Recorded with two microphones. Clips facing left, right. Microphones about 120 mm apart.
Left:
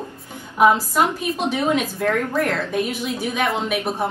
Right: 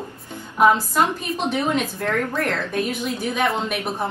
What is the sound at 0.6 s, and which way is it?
A woman's voice, 10° left (ahead or behind).